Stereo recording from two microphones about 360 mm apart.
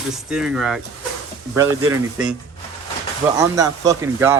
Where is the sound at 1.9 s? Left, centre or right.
Centre.